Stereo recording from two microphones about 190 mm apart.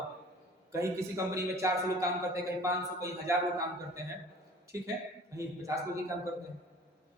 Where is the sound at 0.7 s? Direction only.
15° right (ahead or behind).